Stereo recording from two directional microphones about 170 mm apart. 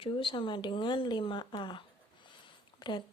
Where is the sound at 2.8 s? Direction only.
25° left (ahead or behind).